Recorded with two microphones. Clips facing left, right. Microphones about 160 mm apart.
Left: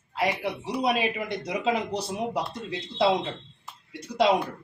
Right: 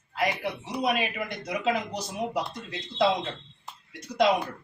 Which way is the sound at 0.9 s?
25° left (ahead or behind).